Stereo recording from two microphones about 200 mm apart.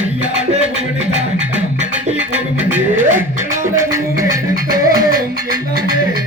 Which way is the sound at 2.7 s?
10° right (ahead or behind).